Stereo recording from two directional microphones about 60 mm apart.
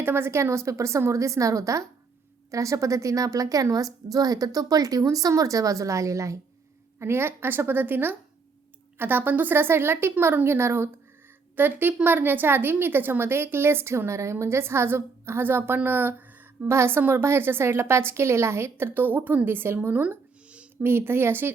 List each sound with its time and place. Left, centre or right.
0.0 s a woman's voice: right
7.0 s a woman's voice: right
11.5 s a woman's voice: right